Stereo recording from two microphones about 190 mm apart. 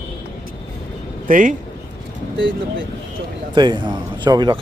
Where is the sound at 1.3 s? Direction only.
45° right (ahead or behind).